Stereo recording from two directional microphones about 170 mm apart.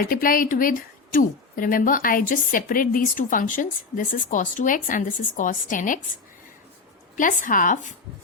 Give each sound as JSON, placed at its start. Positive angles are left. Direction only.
{"t": 0.0, "sound": "a woman's voice", "side_deg": 55}
{"t": 7.2, "sound": "a woman's voice", "side_deg": 50}